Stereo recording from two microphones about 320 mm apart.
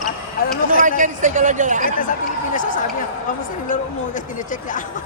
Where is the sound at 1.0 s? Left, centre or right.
Right.